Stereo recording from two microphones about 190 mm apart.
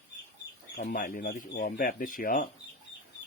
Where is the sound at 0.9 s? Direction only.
50° left (ahead or behind).